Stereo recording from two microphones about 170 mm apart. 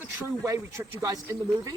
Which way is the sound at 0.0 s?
15° right (ahead or behind).